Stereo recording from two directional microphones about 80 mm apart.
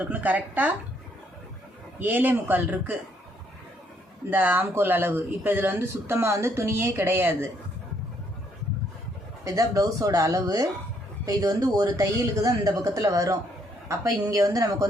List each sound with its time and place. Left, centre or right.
0.0 s speech: centre
2.0 s speech: right
4.3 s speech: right
9.4 s speech: right